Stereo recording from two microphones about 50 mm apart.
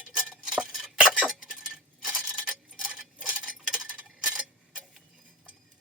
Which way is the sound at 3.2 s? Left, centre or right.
Centre.